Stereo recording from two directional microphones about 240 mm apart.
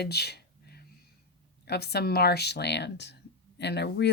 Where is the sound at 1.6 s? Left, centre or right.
Left.